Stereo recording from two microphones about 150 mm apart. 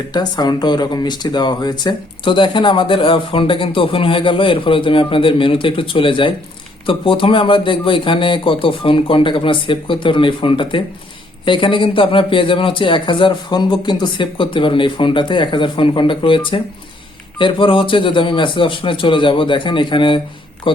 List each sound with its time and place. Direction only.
0.1 s speech: 30° left (ahead or behind)